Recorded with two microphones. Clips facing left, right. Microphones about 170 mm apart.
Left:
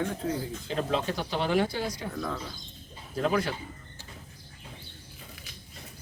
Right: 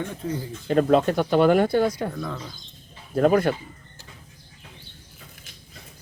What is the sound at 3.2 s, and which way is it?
Speech, 50° right (ahead or behind).